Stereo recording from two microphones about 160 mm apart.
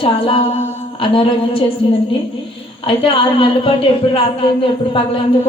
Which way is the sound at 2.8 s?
35° left (ahead or behind).